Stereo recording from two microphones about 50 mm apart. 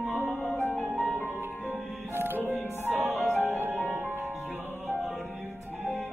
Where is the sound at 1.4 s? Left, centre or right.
Right.